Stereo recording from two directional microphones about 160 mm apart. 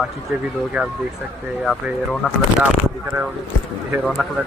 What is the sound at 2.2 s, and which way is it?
Speech, 10° right (ahead or behind).